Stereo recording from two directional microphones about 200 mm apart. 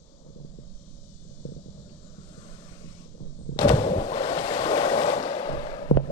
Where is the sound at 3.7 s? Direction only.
25° left (ahead or behind).